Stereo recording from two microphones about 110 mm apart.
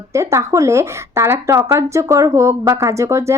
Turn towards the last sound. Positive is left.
turn(degrees=-25)  # may be behind; listen again after turning